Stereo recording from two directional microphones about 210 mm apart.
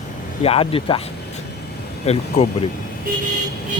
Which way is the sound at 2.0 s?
30° left (ahead or behind).